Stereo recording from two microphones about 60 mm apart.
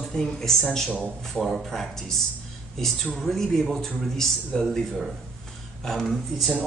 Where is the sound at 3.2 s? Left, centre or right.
Centre.